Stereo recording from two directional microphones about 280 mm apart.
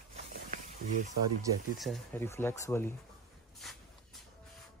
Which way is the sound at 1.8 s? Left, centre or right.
Centre.